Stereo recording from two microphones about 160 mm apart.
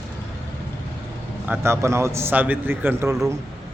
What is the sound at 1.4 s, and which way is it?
A man's voice, 15° right (ahead or behind).